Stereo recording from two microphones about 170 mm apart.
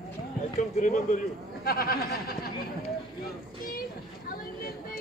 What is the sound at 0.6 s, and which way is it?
Speech, 45° left (ahead or behind).